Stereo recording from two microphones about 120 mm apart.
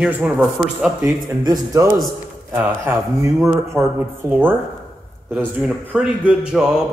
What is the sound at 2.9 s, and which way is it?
Speech, 25° right (ahead or behind).